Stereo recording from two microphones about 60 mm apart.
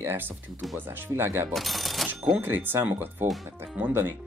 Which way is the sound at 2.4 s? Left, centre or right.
Right.